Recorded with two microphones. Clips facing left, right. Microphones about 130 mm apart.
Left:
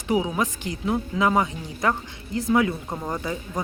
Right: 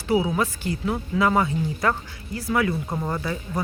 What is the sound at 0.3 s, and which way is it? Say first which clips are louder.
Speech: right 1 dB; 15° left (ahead or behind).